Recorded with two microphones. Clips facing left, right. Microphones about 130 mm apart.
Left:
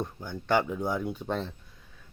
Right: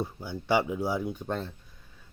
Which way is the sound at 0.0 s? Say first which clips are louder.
Right 1 dB; 10° right (ahead or behind).